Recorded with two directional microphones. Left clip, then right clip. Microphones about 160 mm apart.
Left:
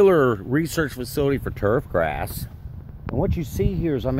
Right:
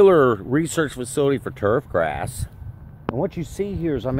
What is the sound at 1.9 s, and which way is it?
Speech, 30° left (ahead or behind).